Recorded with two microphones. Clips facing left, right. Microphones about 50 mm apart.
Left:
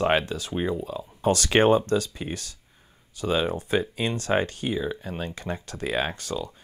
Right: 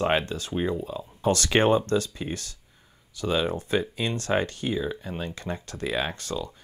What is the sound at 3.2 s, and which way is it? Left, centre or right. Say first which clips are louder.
Speech: left 1 dB; left.